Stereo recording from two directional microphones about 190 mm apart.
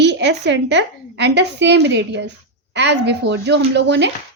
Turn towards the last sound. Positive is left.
turn(degrees=-65)  # may be behind; listen again after turning